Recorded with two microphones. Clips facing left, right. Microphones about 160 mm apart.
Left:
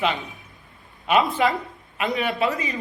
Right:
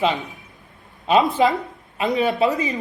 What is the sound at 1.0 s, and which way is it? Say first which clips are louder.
Speech: right 3 dB; 30° right (ahead or behind).